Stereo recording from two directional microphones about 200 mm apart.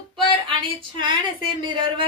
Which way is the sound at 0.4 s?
25° right (ahead or behind).